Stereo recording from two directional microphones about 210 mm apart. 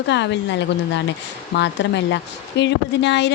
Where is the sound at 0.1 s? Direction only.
55° left (ahead or behind).